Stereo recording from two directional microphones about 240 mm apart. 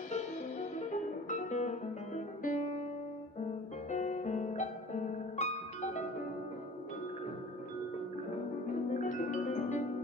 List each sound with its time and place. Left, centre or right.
0.1 s music: left
3.9 s music: left
8.9 s music: left